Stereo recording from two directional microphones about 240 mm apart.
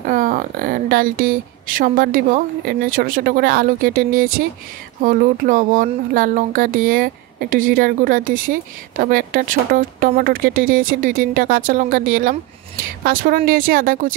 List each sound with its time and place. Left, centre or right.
0.0 s speech: right